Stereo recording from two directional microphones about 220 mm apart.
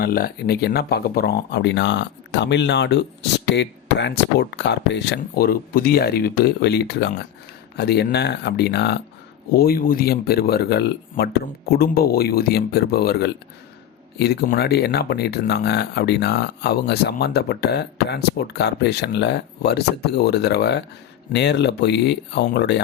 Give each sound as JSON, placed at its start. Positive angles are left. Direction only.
{"t": 0.0, "sound": "speech", "side_deg": 45}